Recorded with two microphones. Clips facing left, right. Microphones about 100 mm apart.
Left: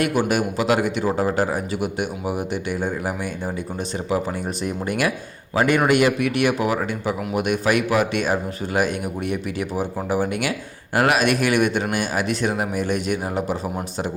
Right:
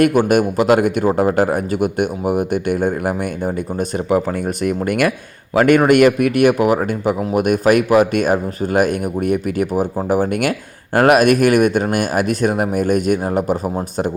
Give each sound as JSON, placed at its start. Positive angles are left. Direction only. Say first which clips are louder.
{"t": 0.0, "sound": "speech", "louder": "right 7 dB", "side_deg": -50}